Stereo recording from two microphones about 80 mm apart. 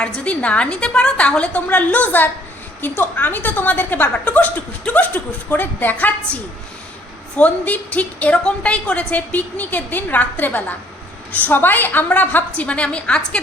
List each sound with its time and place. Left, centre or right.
0.0 s a woman's voice: centre